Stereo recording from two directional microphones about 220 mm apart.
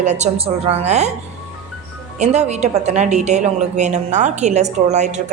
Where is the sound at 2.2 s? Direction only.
30° right (ahead or behind).